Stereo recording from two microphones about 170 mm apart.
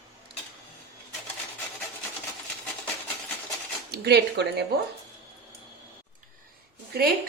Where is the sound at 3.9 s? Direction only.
80° right.